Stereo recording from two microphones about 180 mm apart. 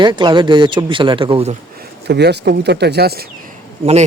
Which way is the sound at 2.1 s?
65° right (ahead or behind).